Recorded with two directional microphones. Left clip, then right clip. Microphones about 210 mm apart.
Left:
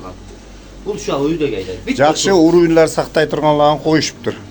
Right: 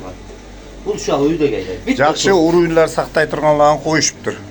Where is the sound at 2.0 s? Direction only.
40° left (ahead or behind).